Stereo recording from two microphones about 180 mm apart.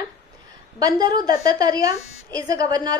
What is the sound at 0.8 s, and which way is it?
A woman's voice, 20° right (ahead or behind).